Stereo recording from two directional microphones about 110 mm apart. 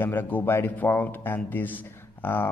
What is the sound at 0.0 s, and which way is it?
A man's voice, 15° left (ahead or behind).